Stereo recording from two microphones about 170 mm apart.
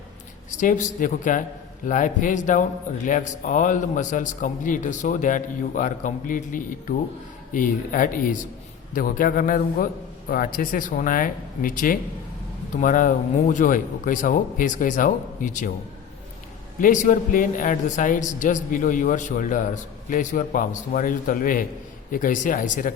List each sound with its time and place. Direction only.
0.6 s a man's voice: 50° left (ahead or behind)
16.8 s a man's voice: 45° left (ahead or behind)